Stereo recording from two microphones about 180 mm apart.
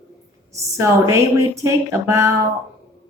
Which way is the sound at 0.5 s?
15° right (ahead or behind).